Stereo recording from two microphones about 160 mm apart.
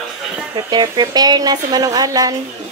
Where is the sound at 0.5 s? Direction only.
25° right (ahead or behind).